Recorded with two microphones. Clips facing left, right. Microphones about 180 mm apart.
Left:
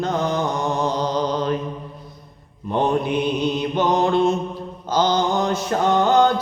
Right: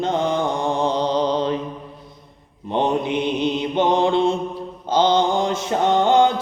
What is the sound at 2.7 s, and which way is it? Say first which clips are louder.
Mantra: even; 20° right (ahead or behind).